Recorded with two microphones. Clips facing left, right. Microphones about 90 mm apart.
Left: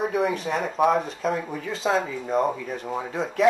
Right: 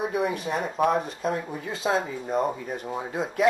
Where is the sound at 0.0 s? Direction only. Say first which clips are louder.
Left 2 dB; 5° right (ahead or behind).